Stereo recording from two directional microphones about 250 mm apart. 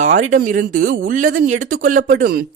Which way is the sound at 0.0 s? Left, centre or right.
Right.